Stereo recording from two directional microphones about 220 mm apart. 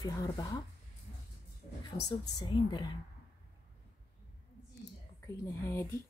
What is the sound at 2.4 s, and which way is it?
Speech, 20° left (ahead or behind).